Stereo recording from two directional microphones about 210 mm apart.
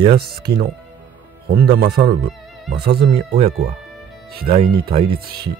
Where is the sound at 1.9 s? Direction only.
25° right (ahead or behind).